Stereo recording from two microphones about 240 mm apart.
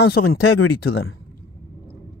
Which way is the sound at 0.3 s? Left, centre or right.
Left.